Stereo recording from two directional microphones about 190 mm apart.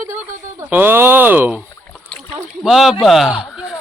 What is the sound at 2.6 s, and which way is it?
Speech, centre (ahead or behind).